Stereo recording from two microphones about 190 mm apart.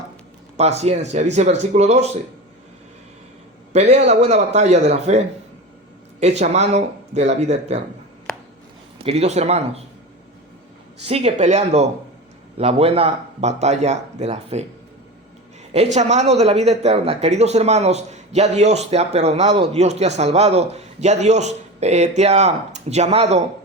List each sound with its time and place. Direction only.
0.5 s speech: 35° right (ahead or behind)
3.7 s speech: 35° right (ahead or behind)
9.0 s speech: 35° right (ahead or behind)
11.0 s speech: 35° right (ahead or behind)
15.7 s speech: 35° right (ahead or behind)